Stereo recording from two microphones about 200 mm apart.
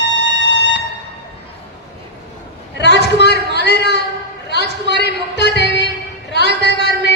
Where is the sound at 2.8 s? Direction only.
60° left (ahead or behind).